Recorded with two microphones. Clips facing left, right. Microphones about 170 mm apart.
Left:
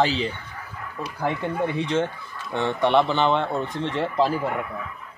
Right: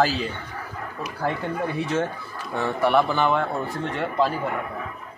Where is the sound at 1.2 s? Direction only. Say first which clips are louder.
Left 1 dB; 20° left (ahead or behind).